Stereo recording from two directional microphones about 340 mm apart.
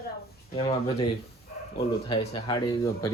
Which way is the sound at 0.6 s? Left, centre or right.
Centre.